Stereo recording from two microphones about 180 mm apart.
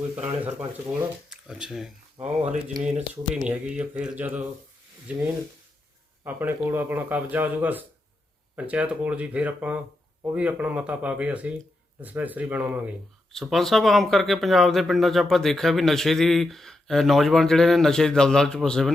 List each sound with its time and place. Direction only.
0.3 s speech: 5° right (ahead or behind)
2.2 s speech: 40° right (ahead or behind)
3.4 s a man's voice: 5° right (ahead or behind)
13.3 s speech: centre (ahead or behind)